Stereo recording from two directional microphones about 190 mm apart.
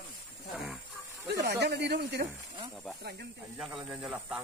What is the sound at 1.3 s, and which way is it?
Snake, 60° right (ahead or behind).